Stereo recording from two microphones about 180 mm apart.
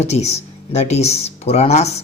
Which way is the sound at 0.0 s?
35° left (ahead or behind).